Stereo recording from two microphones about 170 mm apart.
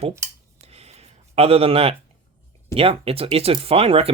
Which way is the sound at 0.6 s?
40° right (ahead or behind).